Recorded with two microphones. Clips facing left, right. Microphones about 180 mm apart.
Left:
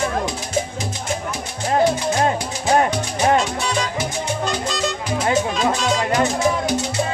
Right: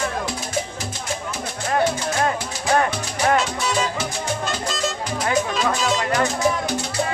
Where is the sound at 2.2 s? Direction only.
25° left (ahead or behind).